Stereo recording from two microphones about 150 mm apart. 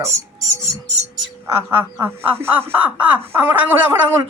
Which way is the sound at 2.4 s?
15° right (ahead or behind).